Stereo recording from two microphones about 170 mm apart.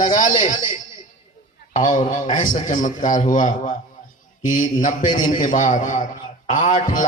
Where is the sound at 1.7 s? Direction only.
50° left (ahead or behind).